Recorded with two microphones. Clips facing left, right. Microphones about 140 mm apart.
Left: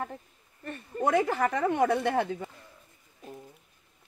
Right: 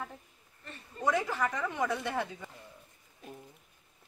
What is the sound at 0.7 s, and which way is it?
Speech, 55° left (ahead or behind).